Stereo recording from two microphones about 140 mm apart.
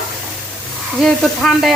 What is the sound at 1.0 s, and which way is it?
Sizzle, centre (ahead or behind).